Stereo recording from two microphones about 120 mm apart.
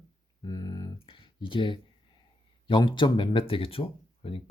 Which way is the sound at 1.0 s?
45° left (ahead or behind).